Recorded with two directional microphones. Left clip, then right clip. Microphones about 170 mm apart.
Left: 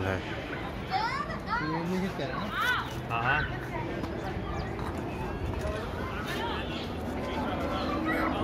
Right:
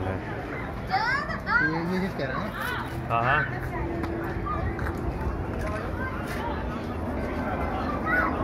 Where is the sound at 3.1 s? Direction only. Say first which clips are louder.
Right 5 dB; 50° right (ahead or behind).